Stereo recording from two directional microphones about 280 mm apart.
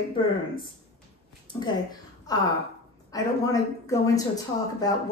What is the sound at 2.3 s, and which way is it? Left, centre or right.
Speech, centre.